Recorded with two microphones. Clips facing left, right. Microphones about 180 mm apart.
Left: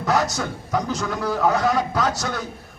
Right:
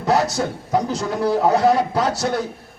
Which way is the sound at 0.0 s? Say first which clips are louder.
Right 3 dB; 30° right (ahead or behind).